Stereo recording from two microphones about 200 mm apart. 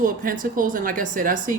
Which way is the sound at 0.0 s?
40° right (ahead or behind).